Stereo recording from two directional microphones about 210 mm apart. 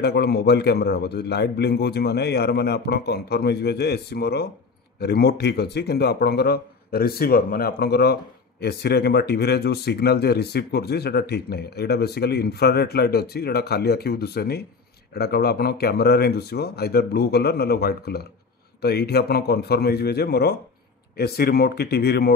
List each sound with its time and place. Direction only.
0.0 s speech: 50° left (ahead or behind)